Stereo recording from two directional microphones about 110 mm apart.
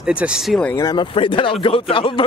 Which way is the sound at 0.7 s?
40° left (ahead or behind).